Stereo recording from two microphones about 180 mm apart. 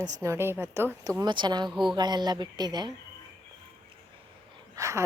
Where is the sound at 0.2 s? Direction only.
15° right (ahead or behind).